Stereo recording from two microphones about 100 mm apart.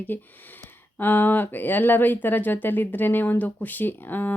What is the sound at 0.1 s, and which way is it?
Speech, 20° left (ahead or behind).